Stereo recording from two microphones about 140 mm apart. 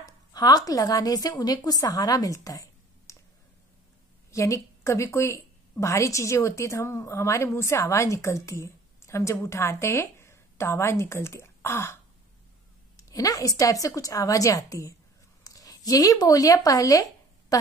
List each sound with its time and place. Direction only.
0.0 s a woman's voice: 25° left (ahead or behind)
4.3 s a woman's voice: 20° left (ahead or behind)